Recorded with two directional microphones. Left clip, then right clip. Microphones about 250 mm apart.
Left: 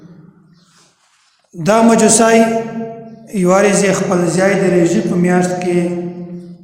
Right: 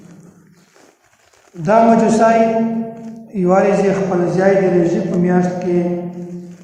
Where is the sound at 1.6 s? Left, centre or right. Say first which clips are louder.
Left 1 dB; left.